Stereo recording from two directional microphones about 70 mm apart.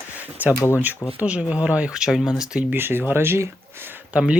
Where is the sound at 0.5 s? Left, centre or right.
Left.